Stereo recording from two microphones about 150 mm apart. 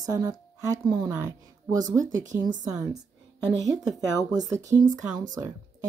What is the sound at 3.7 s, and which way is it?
Speech, 25° right (ahead or behind).